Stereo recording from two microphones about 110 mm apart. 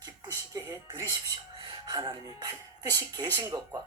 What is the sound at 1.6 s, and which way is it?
Speech, 40° right (ahead or behind).